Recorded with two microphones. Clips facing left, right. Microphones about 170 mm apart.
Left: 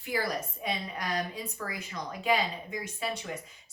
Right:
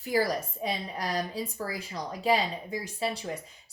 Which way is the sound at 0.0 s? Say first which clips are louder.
Right 5 dB; 35° right (ahead or behind).